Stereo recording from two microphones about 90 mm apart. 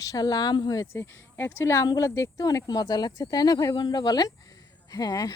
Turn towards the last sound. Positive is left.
turn(degrees=45)  # may be behind; listen again after turning